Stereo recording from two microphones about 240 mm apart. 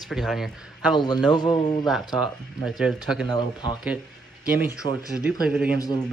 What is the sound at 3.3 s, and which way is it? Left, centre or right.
A man's voice, centre.